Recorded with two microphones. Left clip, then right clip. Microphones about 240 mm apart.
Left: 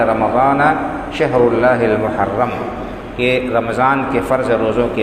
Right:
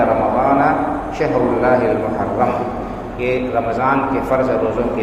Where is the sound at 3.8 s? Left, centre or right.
Left.